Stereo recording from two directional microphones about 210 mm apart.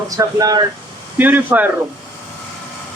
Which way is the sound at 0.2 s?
15° right (ahead or behind).